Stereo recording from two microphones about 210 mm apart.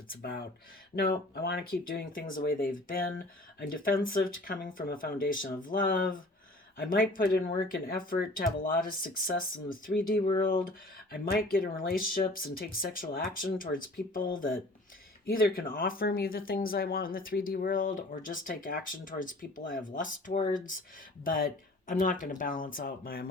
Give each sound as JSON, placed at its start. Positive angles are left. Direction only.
{"t": 0.9, "sound": "speech", "side_deg": 50}
{"t": 3.7, "sound": "speech", "side_deg": 45}